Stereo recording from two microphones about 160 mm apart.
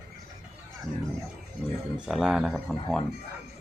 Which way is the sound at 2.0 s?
5° right (ahead or behind).